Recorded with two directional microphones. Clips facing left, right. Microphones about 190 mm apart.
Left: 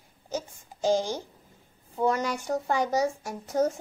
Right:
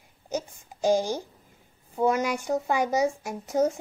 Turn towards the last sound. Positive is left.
turn(degrees=-15)  # may be behind; listen again after turning